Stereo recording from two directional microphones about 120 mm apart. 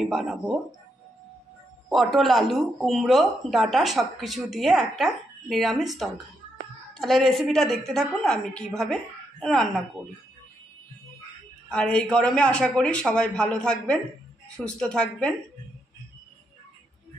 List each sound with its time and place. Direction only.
0.0 s speech: 5° right (ahead or behind)
1.9 s speech: centre (ahead or behind)
11.7 s a man's voice: 5° left (ahead or behind)